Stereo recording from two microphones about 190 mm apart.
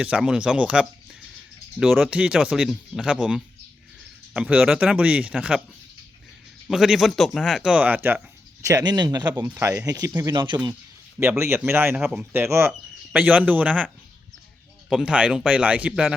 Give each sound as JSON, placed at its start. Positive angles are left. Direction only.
{"t": 0.0, "sound": "speech", "side_deg": -5}
{"t": 6.7, "sound": "speech", "side_deg": 0}
{"t": 11.2, "sound": "speech", "side_deg": -15}
{"t": 14.8, "sound": "speech", "side_deg": -5}